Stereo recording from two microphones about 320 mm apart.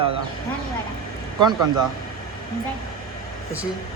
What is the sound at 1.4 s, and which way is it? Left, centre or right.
Speech, centre.